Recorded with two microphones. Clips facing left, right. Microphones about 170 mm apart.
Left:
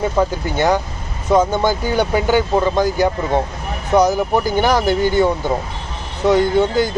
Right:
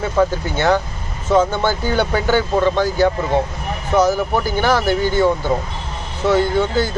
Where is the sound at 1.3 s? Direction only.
15° left (ahead or behind).